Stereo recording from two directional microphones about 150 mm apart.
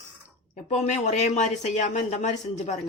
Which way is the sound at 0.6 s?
50° left (ahead or behind).